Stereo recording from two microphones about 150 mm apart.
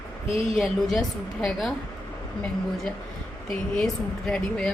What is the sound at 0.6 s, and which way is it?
Speech, centre (ahead or behind).